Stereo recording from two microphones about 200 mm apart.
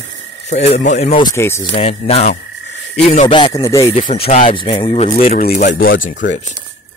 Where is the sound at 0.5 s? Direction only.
35° left (ahead or behind).